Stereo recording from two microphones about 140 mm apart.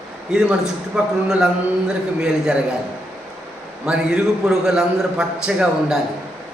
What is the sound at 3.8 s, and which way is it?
A man's voice, 5° right (ahead or behind).